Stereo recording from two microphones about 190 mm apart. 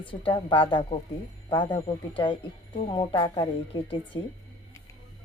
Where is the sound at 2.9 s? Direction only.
25° left (ahead or behind).